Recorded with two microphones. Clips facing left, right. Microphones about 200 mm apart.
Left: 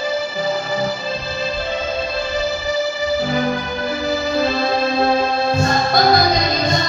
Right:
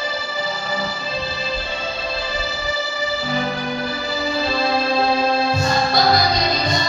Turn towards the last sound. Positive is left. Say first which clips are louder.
# left 2 dB
turn(degrees=50)  # may be behind; listen again after turning